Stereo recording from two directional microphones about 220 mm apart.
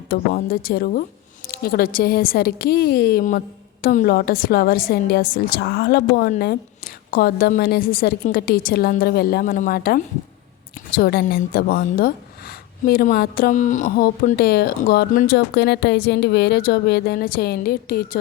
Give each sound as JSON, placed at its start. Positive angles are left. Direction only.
{"t": 0.1, "sound": "a woman's voice", "side_deg": 45}